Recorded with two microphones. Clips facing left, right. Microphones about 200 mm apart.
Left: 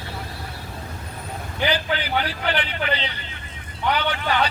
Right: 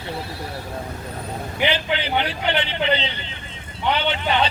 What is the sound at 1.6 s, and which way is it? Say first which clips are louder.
A man's voice: right 1 dB; 25° right (ahead or behind).